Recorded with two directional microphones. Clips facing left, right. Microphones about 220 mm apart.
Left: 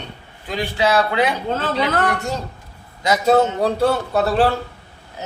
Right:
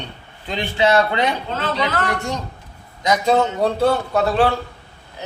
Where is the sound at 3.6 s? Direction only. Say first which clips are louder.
Even; centre (ahead or behind).